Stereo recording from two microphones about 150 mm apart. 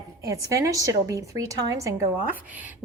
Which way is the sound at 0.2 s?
20° right (ahead or behind).